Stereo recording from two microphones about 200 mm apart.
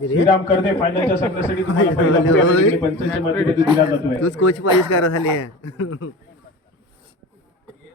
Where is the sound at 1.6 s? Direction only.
65° left (ahead or behind).